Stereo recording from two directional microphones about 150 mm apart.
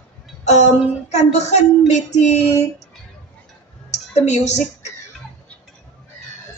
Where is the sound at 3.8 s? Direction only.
50° left (ahead or behind).